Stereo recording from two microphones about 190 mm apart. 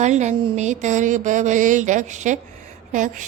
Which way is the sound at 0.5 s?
40° right (ahead or behind).